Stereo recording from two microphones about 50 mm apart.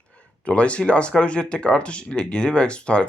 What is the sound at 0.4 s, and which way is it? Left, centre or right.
Speech, left.